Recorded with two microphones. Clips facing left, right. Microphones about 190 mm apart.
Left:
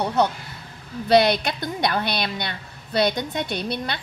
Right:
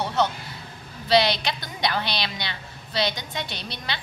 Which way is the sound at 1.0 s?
55° left (ahead or behind).